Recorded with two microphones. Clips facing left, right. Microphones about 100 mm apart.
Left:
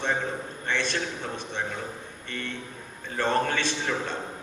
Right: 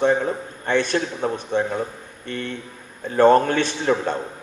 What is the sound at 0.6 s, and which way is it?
A man's voice, 50° right (ahead or behind).